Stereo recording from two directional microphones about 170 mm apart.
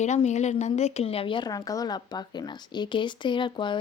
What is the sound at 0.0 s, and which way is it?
A woman's voice, 40° left (ahead or behind).